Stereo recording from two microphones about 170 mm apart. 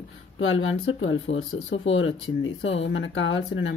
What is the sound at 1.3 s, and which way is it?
Speech, 90° left.